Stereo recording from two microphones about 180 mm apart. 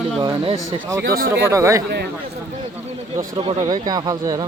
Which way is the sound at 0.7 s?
15° right (ahead or behind).